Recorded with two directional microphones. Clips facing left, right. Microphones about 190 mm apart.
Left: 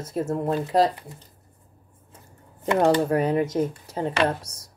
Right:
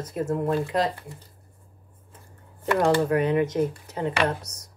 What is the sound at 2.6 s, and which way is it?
Speech, 20° left (ahead or behind).